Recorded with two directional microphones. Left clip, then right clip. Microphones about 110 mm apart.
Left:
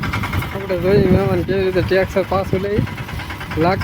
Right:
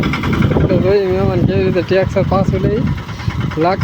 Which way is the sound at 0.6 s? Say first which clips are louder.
Right 1 dB; centre (ahead or behind).